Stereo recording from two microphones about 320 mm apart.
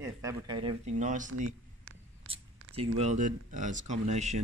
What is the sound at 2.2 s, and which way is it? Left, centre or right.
Whispering, right.